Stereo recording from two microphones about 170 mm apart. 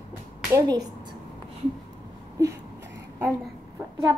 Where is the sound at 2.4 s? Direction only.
15° right (ahead or behind).